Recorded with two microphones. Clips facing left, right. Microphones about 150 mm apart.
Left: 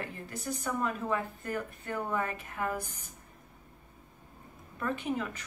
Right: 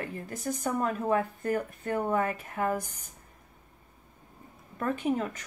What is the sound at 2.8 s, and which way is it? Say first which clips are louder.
Speech: right 2 dB; 15° right (ahead or behind).